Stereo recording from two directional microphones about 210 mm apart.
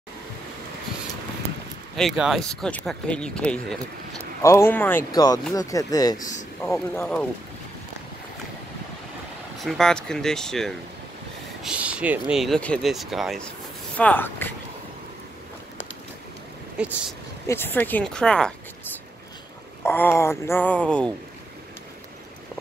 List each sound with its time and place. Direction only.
2.0 s speech: centre (ahead or behind); by 6.1 s 15° left (ahead or behind)
6.1 s speech: 35° left (ahead or behind)
6.6 s speech: 10° left (ahead or behind)
9.6 s speech: centre (ahead or behind)
16.8 s speech: 5° right (ahead or behind)
17.5 s speech: 10° left (ahead or behind)
19.8 s speech: 10° left (ahead or behind)